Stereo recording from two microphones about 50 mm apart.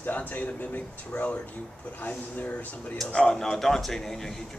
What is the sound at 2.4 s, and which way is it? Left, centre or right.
Speech, left.